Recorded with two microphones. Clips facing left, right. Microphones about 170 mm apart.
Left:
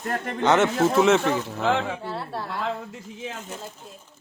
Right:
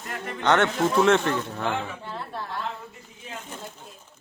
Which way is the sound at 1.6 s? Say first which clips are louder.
Left 8 dB; 90° left.